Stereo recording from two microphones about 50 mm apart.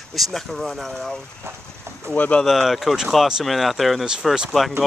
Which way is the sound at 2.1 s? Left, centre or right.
Left.